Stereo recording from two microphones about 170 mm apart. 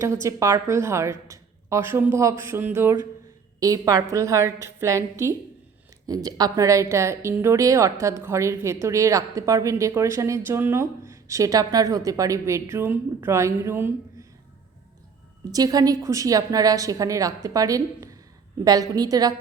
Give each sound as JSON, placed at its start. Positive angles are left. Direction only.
{"t": 0.0, "sound": "a woman's voice", "side_deg": -15}
{"t": 15.5, "sound": "a woman's voice", "side_deg": -20}